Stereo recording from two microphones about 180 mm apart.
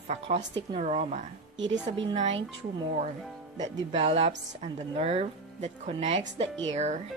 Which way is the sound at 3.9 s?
35° right (ahead or behind).